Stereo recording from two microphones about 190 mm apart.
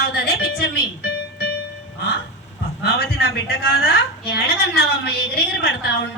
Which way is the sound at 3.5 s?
55° left (ahead or behind).